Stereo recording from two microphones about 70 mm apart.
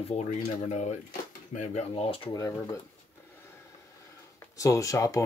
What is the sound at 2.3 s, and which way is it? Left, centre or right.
Speech, left.